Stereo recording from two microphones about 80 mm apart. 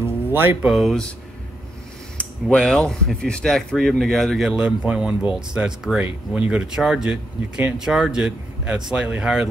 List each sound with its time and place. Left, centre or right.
0.0 s a sound: right
0.6 s speech: centre
2.5 s speech: centre